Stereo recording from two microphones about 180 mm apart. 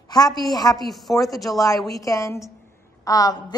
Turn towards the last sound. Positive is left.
turn(degrees=20)  # may be behind; listen again after turning